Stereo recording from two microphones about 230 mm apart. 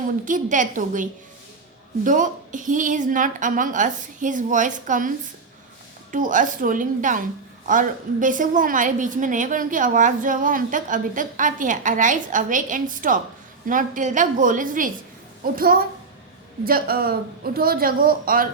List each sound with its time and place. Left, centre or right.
0.3 s a woman's voice: right
2.0 s a woman's voice: right